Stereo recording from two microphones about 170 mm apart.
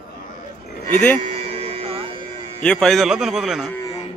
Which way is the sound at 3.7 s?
20° left (ahead or behind).